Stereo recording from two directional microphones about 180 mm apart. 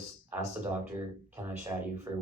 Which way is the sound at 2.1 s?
20° right (ahead or behind).